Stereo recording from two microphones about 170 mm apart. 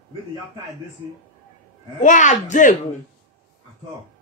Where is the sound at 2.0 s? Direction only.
50° left (ahead or behind).